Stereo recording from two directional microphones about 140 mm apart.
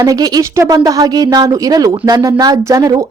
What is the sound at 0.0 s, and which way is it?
A woman's voice, 25° right (ahead or behind).